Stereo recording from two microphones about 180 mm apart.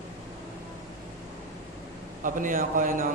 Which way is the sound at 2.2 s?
50° right (ahead or behind).